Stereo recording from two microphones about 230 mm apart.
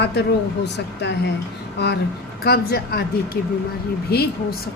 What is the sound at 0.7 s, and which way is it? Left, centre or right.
Speech, left.